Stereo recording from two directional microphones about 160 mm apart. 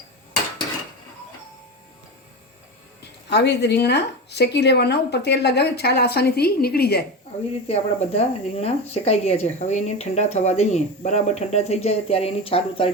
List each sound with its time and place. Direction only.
3.0 s speech: 90° left
7.7 s speech: 40° left (ahead or behind)